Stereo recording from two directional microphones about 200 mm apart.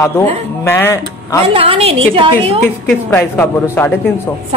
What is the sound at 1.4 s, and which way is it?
A woman's voice, 25° right (ahead or behind).